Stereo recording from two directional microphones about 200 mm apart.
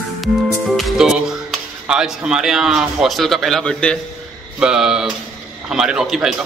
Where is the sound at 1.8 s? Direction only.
5° right (ahead or behind).